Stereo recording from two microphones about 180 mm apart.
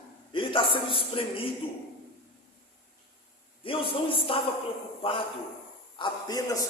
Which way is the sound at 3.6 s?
30° left (ahead or behind).